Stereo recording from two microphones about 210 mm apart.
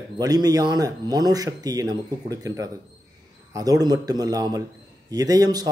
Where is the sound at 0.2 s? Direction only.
15° right (ahead or behind).